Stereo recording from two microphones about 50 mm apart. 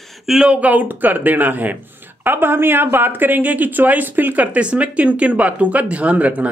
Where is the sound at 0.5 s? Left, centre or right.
Right.